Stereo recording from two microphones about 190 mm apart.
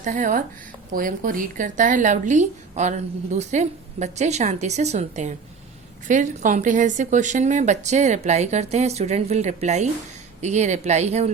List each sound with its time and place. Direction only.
0.0 s a woman's voice: 45° right (ahead or behind)